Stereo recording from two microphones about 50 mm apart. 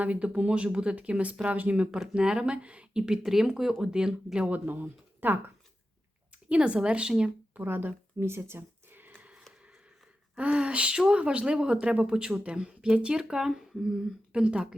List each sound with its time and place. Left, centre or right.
0.0 s speech: right
3.1 s speech: centre
4.4 s speech: right
4.7 s speech: right
6.5 s speech: right
7.5 s a sound: right
10.3 s speech: right
12.5 s speech: centre